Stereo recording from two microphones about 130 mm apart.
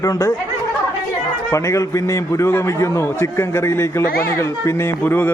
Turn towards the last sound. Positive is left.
turn(degrees=15)  # may be behind; listen again after turning